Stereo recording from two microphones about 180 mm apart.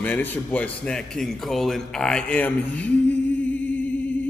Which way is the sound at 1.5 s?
5° left (ahead or behind).